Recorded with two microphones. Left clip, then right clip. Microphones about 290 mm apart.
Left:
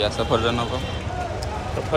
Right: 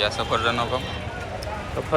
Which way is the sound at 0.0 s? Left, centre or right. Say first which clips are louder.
Left 1 dB; centre.